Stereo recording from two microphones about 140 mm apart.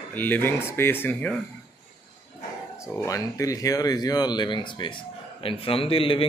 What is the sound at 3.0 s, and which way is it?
A man's voice, 25° left (ahead or behind).